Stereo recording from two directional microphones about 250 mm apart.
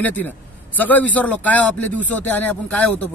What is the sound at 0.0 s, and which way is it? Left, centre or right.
Speech, centre.